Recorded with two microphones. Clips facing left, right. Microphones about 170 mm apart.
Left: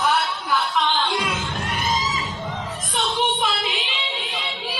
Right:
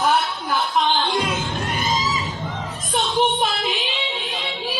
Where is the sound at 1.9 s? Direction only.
Centre (ahead or behind).